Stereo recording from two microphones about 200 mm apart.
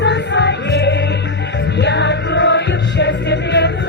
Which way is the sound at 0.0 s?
60° left (ahead or behind).